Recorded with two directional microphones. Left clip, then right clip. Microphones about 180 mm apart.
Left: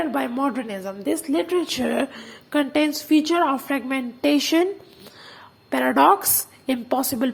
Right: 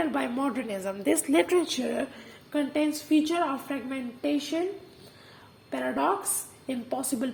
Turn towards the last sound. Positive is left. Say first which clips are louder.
# left 8 dB
turn(degrees=35)  # may be behind; listen again after turning